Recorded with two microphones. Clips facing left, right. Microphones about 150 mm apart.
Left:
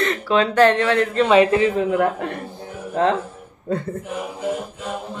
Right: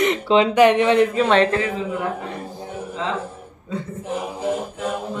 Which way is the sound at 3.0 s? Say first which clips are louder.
Left 8 dB; 55° left (ahead or behind).